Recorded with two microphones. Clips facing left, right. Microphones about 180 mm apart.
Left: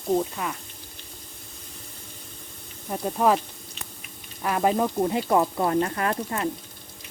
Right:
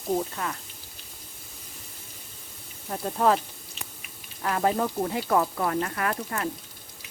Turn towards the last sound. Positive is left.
turn(degrees=25)  # may be behind; listen again after turning